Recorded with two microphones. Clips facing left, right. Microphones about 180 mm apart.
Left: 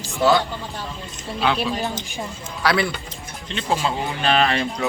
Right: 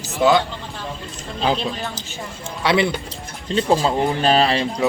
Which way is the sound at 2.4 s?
25° right (ahead or behind).